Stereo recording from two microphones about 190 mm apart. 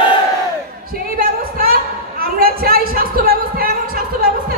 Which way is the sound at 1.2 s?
50° right (ahead or behind).